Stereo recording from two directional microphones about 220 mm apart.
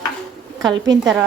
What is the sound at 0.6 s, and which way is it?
Speech, 15° right (ahead or behind).